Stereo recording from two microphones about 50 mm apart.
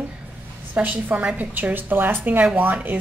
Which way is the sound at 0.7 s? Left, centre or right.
Right.